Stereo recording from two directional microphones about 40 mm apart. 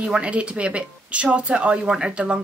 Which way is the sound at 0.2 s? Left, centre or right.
Right.